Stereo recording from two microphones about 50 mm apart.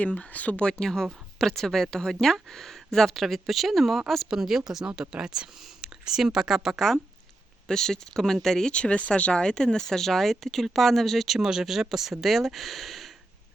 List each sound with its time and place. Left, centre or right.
0.0 s speech: left
0.6 s speech: centre
8.7 s speech: left; by 11.3 s centre
11.3 s speech: centre